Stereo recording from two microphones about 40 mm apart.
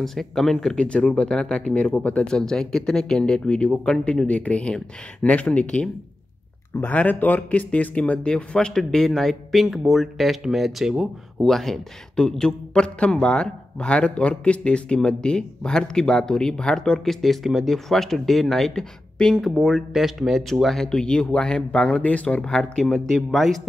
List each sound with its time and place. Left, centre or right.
0.0 s speech: centre
0.7 s a man's voice: left
2.2 s a man's voice: centre
6.9 s speech: left
7.9 s a man's voice: left
8.5 s speech: centre
11.4 s speech: centre
12.2 s a man's voice: centre
17.0 s speech: centre
19.1 s speech: centre
19.9 s a man's voice: centre; by 22.4 s left
22.4 s speech: centre